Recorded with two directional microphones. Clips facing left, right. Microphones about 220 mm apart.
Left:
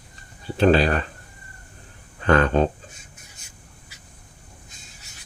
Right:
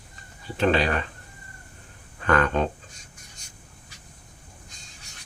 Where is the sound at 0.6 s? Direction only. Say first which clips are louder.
Left 5 dB; 35° left (ahead or behind).